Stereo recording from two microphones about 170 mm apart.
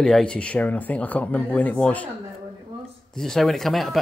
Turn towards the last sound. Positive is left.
turn(degrees=0)  # may be behind; listen again after turning